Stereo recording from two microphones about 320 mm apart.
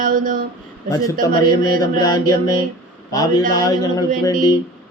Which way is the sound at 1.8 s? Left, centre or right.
Centre.